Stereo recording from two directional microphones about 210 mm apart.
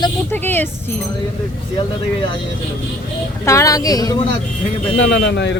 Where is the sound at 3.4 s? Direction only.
15° left (ahead or behind).